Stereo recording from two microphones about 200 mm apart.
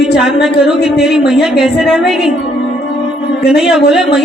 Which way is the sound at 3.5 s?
Centre (ahead or behind).